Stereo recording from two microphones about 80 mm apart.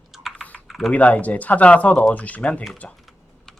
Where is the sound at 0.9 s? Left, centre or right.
Centre.